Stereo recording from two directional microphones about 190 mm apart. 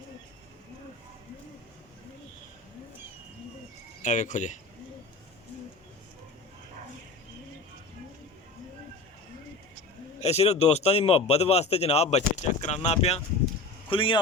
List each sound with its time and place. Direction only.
4.0 s speech: 40° left (ahead or behind)
10.2 s speech: 35° left (ahead or behind)